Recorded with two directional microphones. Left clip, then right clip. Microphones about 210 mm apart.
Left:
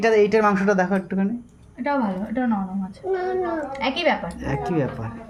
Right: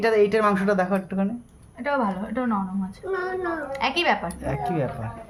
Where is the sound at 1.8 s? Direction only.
50° right (ahead or behind).